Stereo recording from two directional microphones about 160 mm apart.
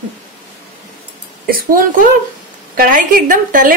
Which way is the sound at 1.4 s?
65° right (ahead or behind).